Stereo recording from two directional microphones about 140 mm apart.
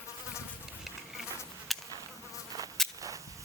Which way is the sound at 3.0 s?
25° right (ahead or behind).